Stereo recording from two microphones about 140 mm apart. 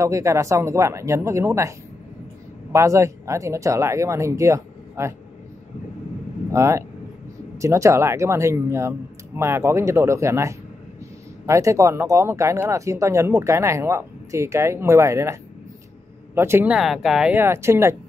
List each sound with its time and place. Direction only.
0.0 s speech: 20° right (ahead or behind)
2.7 s speech: 20° right (ahead or behind)
6.5 s speech: 20° right (ahead or behind)
16.3 s speech: 15° right (ahead or behind)
16.7 s speech: centre (ahead or behind)
17.4 s speech: 20° right (ahead or behind)